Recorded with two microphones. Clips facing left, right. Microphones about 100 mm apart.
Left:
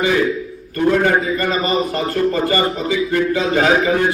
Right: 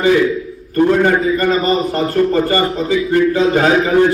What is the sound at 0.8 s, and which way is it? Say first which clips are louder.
A man's voice: right 3 dB; 40° right (ahead or behind).